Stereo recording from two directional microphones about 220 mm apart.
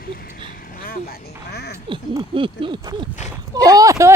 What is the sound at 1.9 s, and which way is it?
Speech, 25° right (ahead or behind).